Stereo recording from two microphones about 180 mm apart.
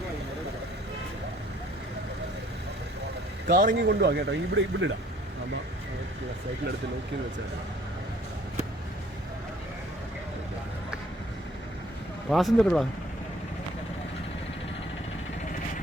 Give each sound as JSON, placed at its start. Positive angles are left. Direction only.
{"t": 3.4, "sound": "speech", "side_deg": -55}
{"t": 12.3, "sound": "speech", "side_deg": 0}